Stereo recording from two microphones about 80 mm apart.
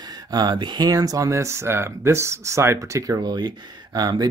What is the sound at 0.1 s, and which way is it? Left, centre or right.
Speech, right.